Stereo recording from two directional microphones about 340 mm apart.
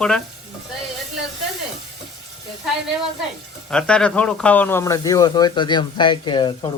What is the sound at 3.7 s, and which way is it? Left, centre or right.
Speech, centre.